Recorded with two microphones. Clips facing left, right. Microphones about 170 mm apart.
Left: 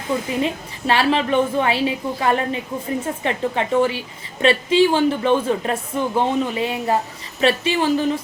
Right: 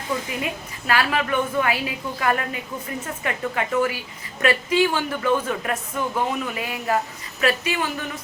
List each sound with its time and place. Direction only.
0.4 s a woman's voice: 25° left (ahead or behind)